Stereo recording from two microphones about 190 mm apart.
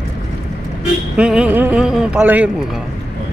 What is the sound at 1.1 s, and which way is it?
Speech, 5° right (ahead or behind).